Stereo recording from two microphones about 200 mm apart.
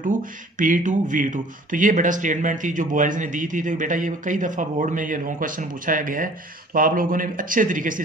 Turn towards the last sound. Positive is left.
turn(degrees=-40)  # may be behind; listen again after turning